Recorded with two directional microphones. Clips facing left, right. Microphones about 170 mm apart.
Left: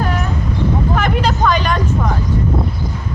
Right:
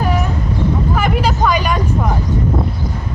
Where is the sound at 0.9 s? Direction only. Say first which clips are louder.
Even; 5° right (ahead or behind).